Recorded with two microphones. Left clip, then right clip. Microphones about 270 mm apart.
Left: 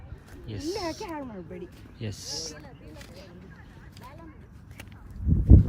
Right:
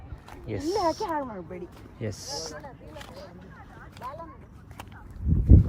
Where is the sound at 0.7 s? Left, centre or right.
Right.